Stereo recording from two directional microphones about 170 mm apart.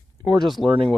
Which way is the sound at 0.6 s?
35° right (ahead or behind).